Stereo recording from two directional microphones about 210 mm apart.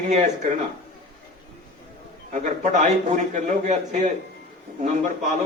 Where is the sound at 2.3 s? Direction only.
35° right (ahead or behind).